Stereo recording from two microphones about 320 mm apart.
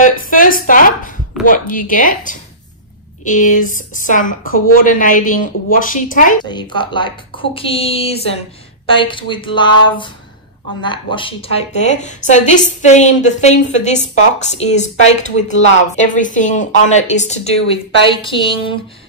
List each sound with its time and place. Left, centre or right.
0.0 s a woman's voice: left
6.4 s a woman's voice: centre